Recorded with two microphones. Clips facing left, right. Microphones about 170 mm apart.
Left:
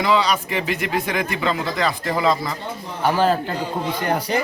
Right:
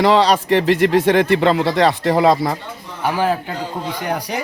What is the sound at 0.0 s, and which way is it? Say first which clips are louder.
Speech: right 5 dB; 80° right.